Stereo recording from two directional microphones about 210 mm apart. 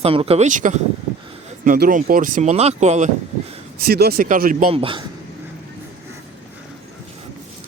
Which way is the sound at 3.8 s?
50° right (ahead or behind).